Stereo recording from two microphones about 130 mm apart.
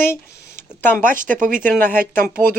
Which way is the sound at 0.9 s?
90° right.